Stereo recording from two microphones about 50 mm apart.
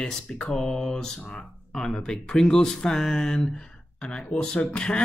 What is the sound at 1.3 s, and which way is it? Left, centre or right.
Speech, centre.